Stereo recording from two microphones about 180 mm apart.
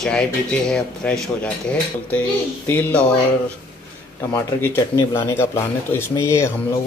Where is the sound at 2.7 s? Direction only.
10° left (ahead or behind).